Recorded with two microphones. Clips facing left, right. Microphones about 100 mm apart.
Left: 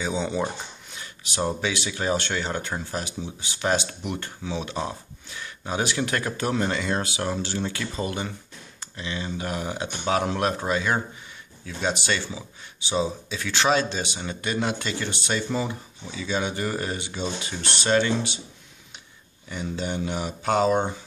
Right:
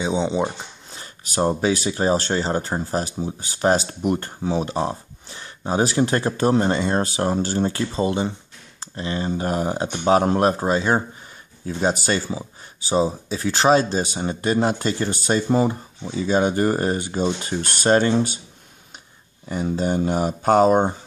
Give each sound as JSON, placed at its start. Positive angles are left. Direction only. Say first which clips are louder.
{"t": 0.0, "sound": "speech", "louder": "right 5 dB", "side_deg": -20}
{"t": 0.9, "sound": "speech", "louder": "right 6 dB", "side_deg": -40}
{"t": 8.9, "sound": "speech", "louder": "right 7 dB", "side_deg": -40}
{"t": 19.5, "sound": "speech", "louder": "right 7 dB", "side_deg": -40}